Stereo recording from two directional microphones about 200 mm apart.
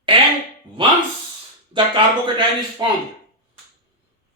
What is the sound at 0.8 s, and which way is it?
Speech, 25° right (ahead or behind).